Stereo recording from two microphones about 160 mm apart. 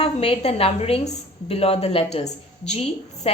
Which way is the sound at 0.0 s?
40° left (ahead or behind).